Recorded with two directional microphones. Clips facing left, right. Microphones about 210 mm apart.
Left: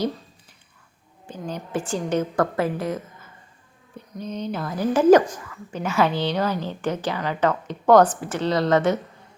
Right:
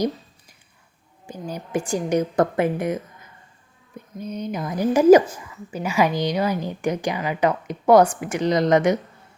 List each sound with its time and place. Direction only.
1.3 s a woman's voice: 10° right (ahead or behind)